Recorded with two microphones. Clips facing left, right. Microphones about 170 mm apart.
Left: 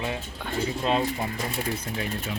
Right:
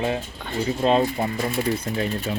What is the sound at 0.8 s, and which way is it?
Speech, 35° right (ahead or behind).